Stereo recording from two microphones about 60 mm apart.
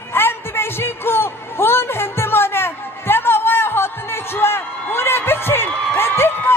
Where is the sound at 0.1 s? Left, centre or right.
Left.